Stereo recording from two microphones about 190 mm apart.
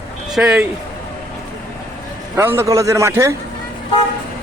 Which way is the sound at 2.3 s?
15° right (ahead or behind).